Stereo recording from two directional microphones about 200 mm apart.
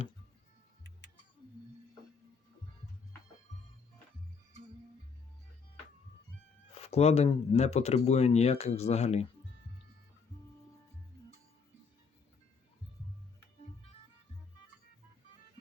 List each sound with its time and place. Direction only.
6.7 s speech: 30° left (ahead or behind)